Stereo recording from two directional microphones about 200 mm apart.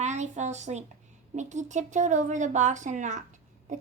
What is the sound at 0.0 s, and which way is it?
A child's voice, 35° right (ahead or behind).